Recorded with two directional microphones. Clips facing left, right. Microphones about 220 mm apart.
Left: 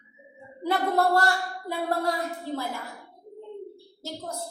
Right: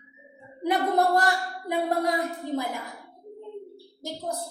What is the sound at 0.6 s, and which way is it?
Speech, 15° right (ahead or behind).